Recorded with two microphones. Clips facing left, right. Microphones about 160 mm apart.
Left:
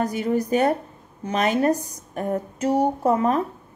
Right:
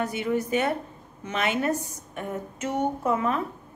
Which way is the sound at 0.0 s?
40° left (ahead or behind).